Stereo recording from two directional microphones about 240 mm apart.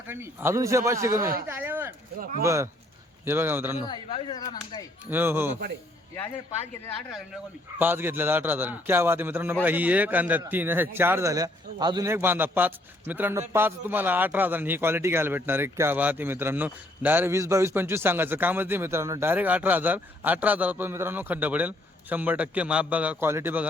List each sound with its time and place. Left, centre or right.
0.1 s a man's voice: centre
1.2 s speech: right
1.5 s a man's voice: centre
3.8 s speech: centre
5.0 s a man's voice: centre
7.8 s a man's voice: centre